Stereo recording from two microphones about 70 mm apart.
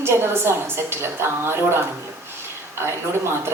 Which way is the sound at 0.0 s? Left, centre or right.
Right.